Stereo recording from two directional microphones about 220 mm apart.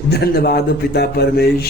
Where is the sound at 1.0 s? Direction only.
45° left (ahead or behind).